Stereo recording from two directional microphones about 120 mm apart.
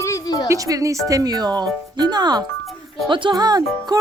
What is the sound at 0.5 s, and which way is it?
Speech, 30° right (ahead or behind).